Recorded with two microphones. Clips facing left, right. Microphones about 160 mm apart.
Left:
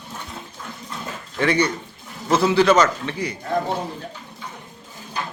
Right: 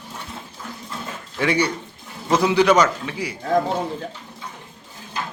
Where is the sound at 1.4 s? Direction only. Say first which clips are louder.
Left 1 dB; 10° right (ahead or behind).